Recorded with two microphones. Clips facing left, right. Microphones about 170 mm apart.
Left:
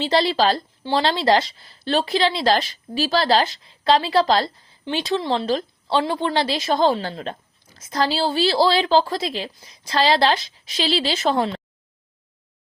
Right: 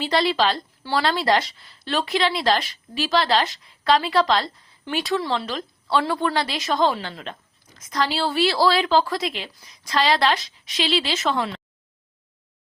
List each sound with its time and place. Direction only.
0.0 s a woman's voice: 30° left (ahead or behind)
0.8 s a woman's voice: 20° left (ahead or behind)